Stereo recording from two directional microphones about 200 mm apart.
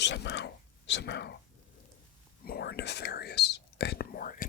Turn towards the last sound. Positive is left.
turn(degrees=45)  # may be behind; listen again after turning